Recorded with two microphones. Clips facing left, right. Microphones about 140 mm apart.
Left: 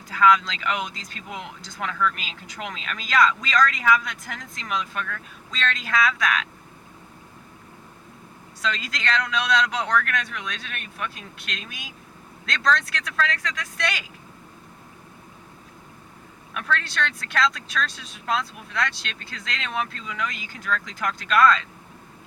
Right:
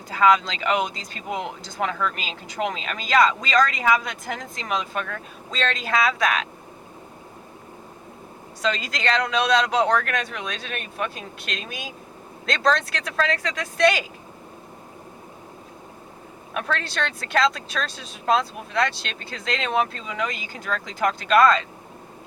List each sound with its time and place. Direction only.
0.1 s speech: 30° right (ahead or behind)
8.6 s speech: 30° right (ahead or behind)
16.6 s speech: 35° right (ahead or behind)